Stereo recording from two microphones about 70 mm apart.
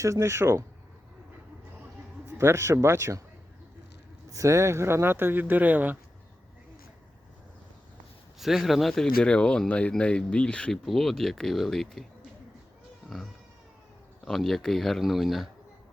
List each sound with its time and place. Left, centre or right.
0.0 s speech: right
2.2 s speech: right
4.3 s speech: right
8.4 s speech: centre
14.3 s speech: centre